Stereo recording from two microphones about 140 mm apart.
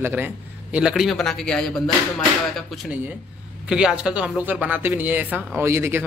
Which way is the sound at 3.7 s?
5° right (ahead or behind).